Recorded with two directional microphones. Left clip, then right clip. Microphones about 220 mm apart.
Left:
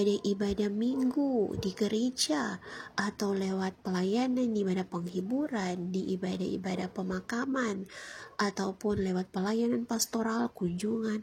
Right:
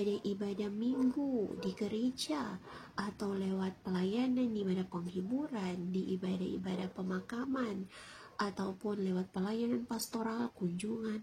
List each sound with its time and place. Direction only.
0.0 s a woman's voice: 35° left (ahead or behind)